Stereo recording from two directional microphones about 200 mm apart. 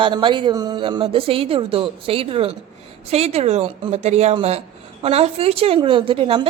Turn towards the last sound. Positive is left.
turn(degrees=-25)  # may be behind; listen again after turning